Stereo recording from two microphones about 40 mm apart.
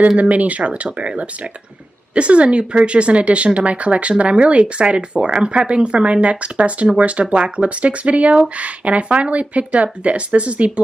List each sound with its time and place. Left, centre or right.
0.2 s speech: right